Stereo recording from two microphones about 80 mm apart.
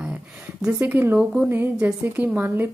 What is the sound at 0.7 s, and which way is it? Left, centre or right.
A woman's voice, right.